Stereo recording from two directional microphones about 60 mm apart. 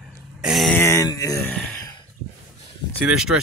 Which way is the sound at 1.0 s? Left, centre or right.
Left.